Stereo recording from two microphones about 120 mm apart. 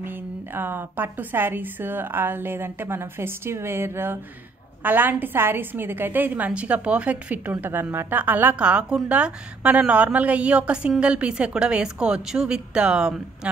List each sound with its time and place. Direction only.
0.0 s a woman's voice: 15° right (ahead or behind)